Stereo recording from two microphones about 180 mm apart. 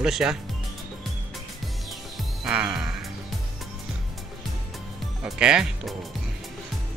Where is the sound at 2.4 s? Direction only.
5° right (ahead or behind).